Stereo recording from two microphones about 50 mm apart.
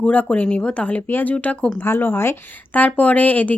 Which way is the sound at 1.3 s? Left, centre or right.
Left.